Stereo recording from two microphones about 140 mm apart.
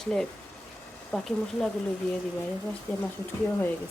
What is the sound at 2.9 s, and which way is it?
Speech, 10° left (ahead or behind).